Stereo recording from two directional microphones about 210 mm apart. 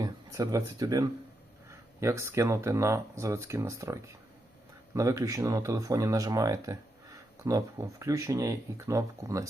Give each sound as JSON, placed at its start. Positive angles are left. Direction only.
{"t": 0.0, "sound": "speech", "side_deg": -15}